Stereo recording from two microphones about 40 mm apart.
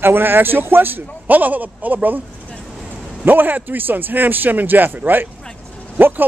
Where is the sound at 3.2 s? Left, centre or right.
Right.